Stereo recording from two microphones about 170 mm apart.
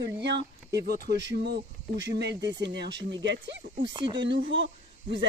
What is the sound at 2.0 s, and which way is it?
Speech, 90° right.